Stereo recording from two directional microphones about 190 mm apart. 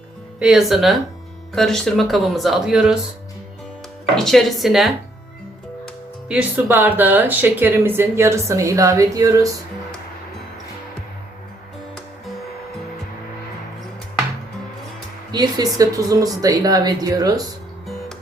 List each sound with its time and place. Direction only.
0.3 s speech: 5° right (ahead or behind)
4.1 s speech: centre (ahead or behind); by 9.5 s 15° right (ahead or behind)
15.3 s speech: 20° right (ahead or behind)